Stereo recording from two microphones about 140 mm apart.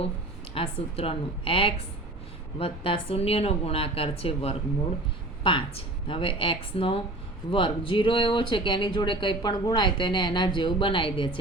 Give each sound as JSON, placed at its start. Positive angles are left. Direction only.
{"t": 0.5, "sound": "a woman's voice", "side_deg": 40}